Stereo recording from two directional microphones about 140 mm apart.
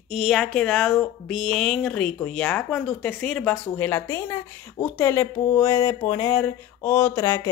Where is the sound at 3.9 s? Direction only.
15° left (ahead or behind).